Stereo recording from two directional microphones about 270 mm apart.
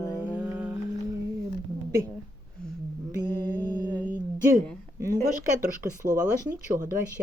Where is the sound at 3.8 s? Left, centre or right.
Centre.